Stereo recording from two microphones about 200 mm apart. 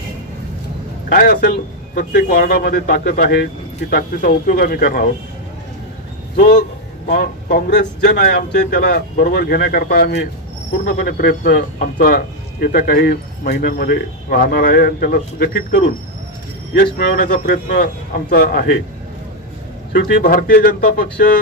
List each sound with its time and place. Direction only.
1.0 s speech: 40° left (ahead or behind)
7.1 s speech: 50° left (ahead or behind)
19.9 s speech: 50° left (ahead or behind)